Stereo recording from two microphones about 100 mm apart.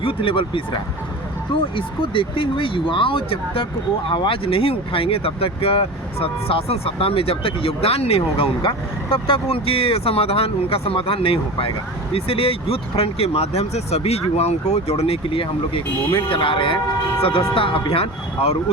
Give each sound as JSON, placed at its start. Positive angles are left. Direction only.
{"t": 0.0, "sound": "speech", "side_deg": 65}
{"t": 8.6, "sound": "speech", "side_deg": 65}